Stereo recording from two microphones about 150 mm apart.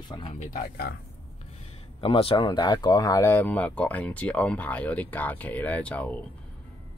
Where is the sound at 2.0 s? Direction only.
35° left (ahead or behind); by 6.1 s 10° left (ahead or behind).